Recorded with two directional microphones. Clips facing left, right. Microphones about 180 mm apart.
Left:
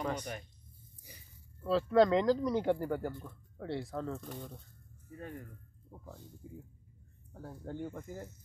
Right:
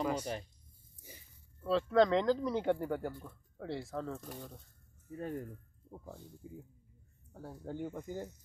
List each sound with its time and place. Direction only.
0.0 s speech: 10° right (ahead or behind)
1.6 s speech: centre (ahead or behind)
5.1 s speech: 35° right (ahead or behind)
5.9 s speech: 15° right (ahead or behind)
6.4 s speech: 5° right (ahead or behind)